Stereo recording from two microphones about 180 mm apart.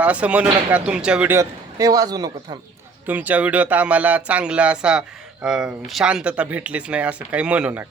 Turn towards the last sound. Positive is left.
turn(degrees=-5)  # may be behind; listen again after turning